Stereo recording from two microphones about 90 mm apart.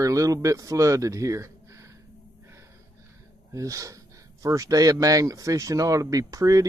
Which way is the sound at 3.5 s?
35° right (ahead or behind).